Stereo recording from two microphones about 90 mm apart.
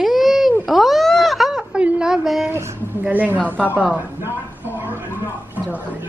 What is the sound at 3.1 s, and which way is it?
Speech, 15° right (ahead or behind).